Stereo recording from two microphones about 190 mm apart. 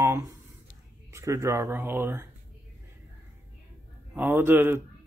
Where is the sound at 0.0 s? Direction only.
15° right (ahead or behind).